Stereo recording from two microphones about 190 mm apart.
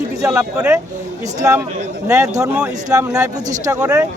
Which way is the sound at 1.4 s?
15° right (ahead or behind).